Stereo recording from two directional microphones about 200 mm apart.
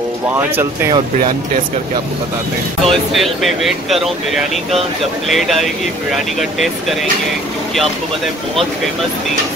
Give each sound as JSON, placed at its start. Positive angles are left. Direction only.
{"t": 0.6, "sound": "speech", "side_deg": -15}
{"t": 2.8, "sound": "speech", "side_deg": 0}
{"t": 5.3, "sound": "speech", "side_deg": 0}